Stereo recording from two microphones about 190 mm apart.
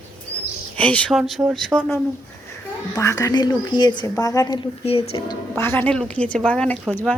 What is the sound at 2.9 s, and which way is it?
A woman's voice, 15° left (ahead or behind).